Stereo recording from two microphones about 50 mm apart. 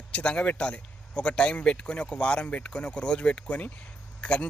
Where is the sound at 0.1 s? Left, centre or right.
Left.